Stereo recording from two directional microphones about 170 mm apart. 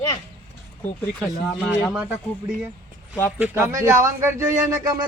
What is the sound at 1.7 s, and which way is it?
Speech, 10° right (ahead or behind).